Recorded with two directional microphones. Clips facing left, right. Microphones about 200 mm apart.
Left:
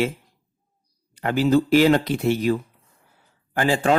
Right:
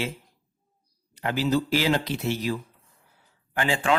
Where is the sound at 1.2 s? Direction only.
50° left (ahead or behind).